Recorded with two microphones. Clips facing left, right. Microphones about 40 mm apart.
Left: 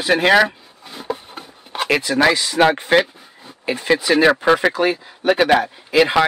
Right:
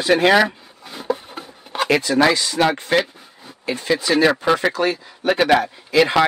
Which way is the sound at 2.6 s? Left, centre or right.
Left.